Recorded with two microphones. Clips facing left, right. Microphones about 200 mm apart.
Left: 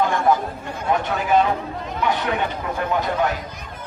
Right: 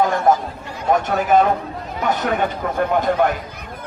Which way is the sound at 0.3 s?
45° right (ahead or behind).